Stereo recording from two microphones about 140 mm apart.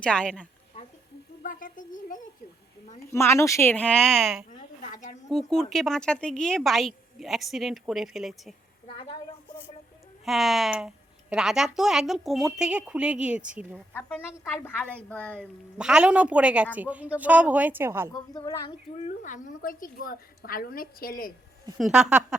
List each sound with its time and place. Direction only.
0.0 s a woman's voice: 5° left (ahead or behind)
1.4 s speech: 75° left (ahead or behind)
3.1 s a woman's voice: 20° left (ahead or behind); by 4.4 s centre (ahead or behind)
4.8 s a woman's voice: 60° left (ahead or behind)
5.3 s a woman's voice: centre (ahead or behind)
10.2 s a woman's voice: centre (ahead or behind)
13.9 s a woman's voice: 15° left (ahead or behind)
15.8 s a woman's voice: 5° right (ahead or behind)
18.1 s a woman's voice: 30° left (ahead or behind)
19.0 s a woman's voice: 65° left (ahead or behind); by 21.3 s 90° left
21.8 s a woman's voice: centre (ahead or behind)